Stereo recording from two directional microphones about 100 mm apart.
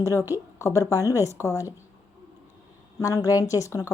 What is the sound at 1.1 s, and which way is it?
Speech, 25° right (ahead or behind).